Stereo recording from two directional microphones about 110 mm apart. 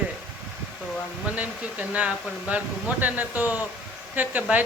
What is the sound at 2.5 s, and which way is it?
A man's voice, 15° right (ahead or behind).